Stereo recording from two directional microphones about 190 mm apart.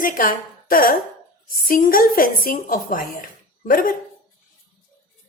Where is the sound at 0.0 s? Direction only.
45° left (ahead or behind).